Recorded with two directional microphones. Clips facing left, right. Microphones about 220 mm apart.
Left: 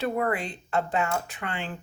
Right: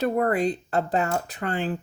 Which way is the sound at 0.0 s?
40° right (ahead or behind).